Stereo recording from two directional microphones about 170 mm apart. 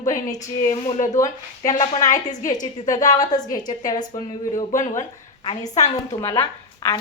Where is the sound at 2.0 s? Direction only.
50° left (ahead or behind).